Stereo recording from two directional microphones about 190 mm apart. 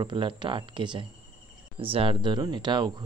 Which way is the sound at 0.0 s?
25° right (ahead or behind).